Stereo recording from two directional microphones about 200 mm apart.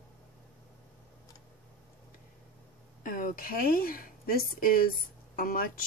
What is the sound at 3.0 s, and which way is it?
Speech, 45° left (ahead or behind).